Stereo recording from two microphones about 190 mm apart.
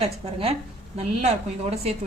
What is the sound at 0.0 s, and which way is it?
A woman's voice, 30° right (ahead or behind).